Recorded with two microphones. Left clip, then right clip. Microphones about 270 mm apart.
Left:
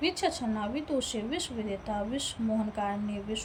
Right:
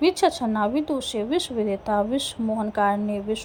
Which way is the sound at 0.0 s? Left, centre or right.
Centre.